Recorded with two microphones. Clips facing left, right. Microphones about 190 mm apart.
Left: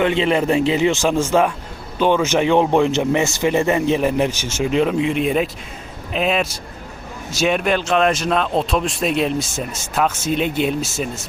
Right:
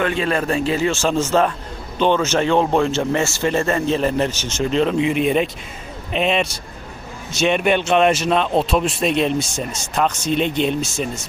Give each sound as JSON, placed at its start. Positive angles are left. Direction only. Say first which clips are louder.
{"t": 0.0, "sound": "speech", "louder": "left 3 dB", "side_deg": 20}